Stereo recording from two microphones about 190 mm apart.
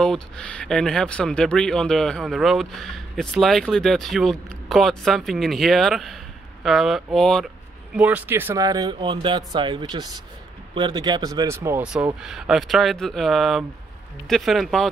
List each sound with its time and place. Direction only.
0.0 s speech: 5° left (ahead or behind)
7.9 s speech: 5° right (ahead or behind)